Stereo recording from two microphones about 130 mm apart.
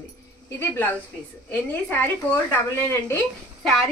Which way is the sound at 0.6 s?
20° left (ahead or behind).